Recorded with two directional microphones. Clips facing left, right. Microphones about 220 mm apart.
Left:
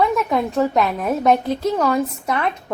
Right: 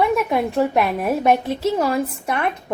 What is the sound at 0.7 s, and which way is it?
A woman's voice, 10° right (ahead or behind).